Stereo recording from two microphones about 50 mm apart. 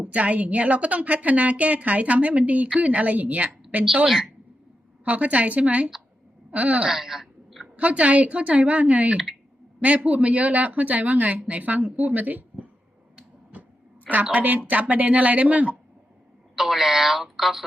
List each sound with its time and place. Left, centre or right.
0.0 s a woman's voice: right
4.0 s a woman's voice: centre
5.0 s a woman's voice: right
6.8 s a sound: centre
7.8 s a woman's voice: right
14.1 s speech: right
16.6 s speech: centre